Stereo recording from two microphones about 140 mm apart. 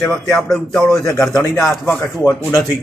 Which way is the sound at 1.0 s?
25° left (ahead or behind).